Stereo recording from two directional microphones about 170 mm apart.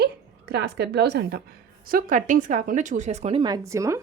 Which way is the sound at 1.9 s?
55° right (ahead or behind).